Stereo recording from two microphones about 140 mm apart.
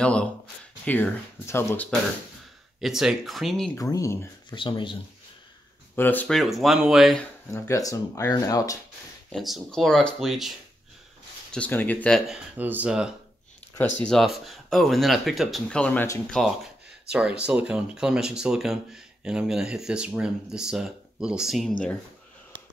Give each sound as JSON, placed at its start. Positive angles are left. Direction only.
{"t": 0.0, "sound": "speech", "side_deg": 5}
{"t": 2.8, "sound": "speech", "side_deg": -5}
{"t": 3.7, "sound": "speech", "side_deg": 25}
{"t": 4.5, "sound": "speech", "side_deg": 35}
{"t": 5.9, "sound": "speech", "side_deg": 15}
{"t": 6.2, "sound": "speech", "side_deg": 0}
{"t": 7.5, "sound": "speech", "side_deg": 20}
{"t": 9.3, "sound": "speech", "side_deg": 0}
{"t": 11.5, "sound": "speech", "side_deg": 10}
{"t": 12.3, "sound": "speech", "side_deg": -10}
{"t": 13.7, "sound": "speech", "side_deg": 10}